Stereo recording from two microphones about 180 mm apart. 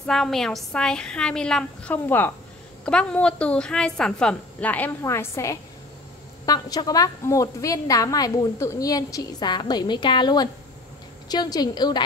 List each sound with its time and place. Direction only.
0.0 s a woman's voice: centre (ahead or behind); by 12.0 s 25° left (ahead or behind)